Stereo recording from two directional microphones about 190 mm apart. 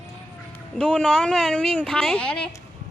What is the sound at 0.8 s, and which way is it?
Speech, 5° left (ahead or behind).